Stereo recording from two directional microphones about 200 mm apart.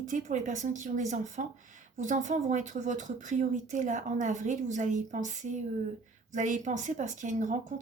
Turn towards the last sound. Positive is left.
turn(degrees=-40)  # may be behind; listen again after turning